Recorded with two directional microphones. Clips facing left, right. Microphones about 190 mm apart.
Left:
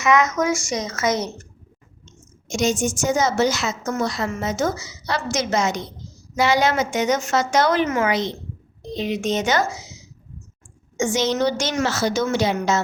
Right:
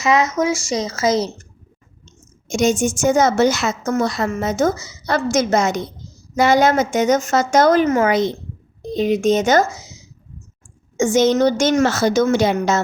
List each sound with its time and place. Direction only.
0.0 s a woman's voice: 30° right (ahead or behind)
2.5 s a woman's voice: 50° right (ahead or behind)